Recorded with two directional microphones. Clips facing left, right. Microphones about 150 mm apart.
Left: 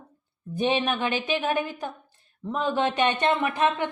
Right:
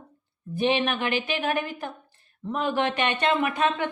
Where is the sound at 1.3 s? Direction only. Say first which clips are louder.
Left 1 dB; 20° left (ahead or behind).